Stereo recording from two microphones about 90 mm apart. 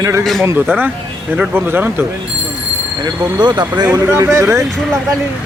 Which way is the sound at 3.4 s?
55° right (ahead or behind).